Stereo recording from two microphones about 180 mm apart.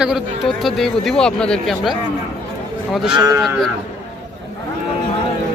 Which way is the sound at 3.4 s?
Centre (ahead or behind).